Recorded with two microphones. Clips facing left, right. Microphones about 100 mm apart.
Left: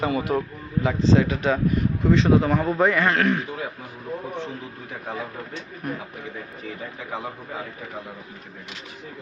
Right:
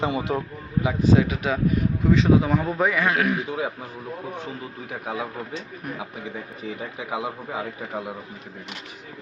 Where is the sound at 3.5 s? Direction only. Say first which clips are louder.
Right 4 dB; 15° right (ahead or behind).